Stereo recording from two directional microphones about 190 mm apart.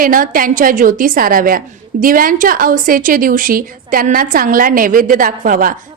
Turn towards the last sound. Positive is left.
turn(degrees=-45)  # may be behind; listen again after turning